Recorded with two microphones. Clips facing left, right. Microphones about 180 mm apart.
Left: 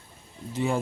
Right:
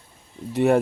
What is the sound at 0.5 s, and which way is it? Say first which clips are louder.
Speech: right 9 dB; 65° right (ahead or behind).